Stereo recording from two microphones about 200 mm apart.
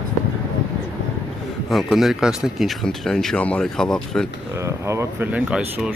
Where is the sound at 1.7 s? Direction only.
Centre (ahead or behind).